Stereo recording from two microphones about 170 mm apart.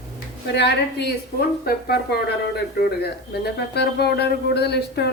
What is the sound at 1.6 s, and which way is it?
Speech, 65° left (ahead or behind).